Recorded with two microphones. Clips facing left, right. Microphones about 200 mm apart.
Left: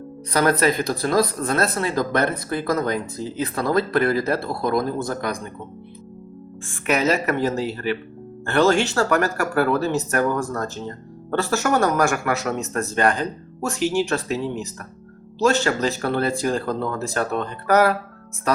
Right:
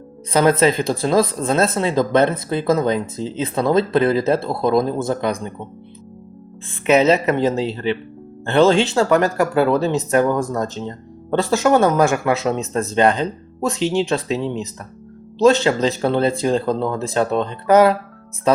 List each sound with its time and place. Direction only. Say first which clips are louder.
0.3 s speech: right 4 dB; 20° right (ahead or behind)
6.8 s speech: right 6 dB; 20° right (ahead or behind)